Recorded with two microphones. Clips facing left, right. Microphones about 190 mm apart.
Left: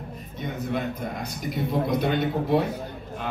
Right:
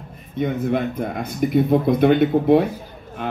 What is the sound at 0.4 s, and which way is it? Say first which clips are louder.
A man's voice: right 8 dB; 55° right (ahead or behind).